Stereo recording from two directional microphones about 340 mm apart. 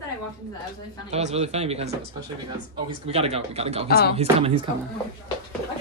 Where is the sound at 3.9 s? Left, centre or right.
Left.